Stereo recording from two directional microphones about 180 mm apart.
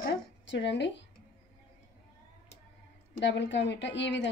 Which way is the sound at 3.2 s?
85° left.